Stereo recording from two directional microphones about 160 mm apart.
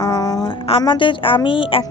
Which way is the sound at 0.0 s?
25° left (ahead or behind).